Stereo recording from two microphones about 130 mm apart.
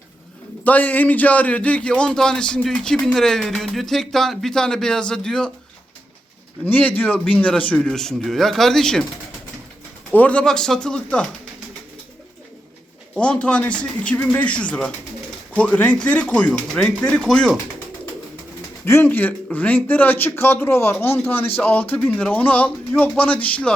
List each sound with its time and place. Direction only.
0.6 s a man's voice: 10° left (ahead or behind)
6.7 s speech: 15° left (ahead or behind)
10.1 s speech: 10° left (ahead or behind)
13.1 s speech: 10° left (ahead or behind)
18.9 s speech: 15° left (ahead or behind)